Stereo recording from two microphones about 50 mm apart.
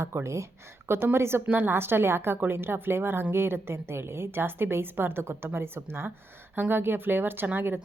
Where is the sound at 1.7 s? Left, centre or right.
Right.